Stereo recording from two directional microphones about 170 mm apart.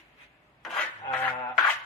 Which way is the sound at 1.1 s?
10° left (ahead or behind).